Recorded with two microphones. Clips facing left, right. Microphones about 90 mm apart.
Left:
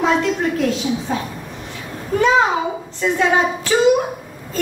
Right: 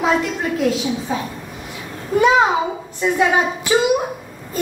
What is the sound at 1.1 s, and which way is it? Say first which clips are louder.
Speech: right 1 dB; centre (ahead or behind).